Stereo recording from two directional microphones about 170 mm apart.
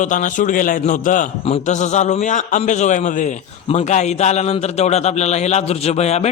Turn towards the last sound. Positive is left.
turn(degrees=40)  # may be behind; listen again after turning